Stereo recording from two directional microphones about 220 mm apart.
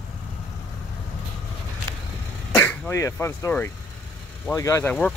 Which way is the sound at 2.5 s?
10° left (ahead or behind).